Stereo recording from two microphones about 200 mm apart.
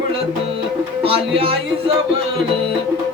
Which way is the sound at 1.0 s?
30° right (ahead or behind).